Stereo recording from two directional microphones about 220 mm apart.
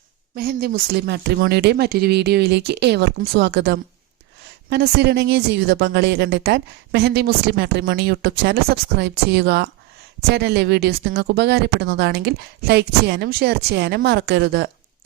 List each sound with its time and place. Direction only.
0.3 s a woman's voice: 45° right (ahead or behind)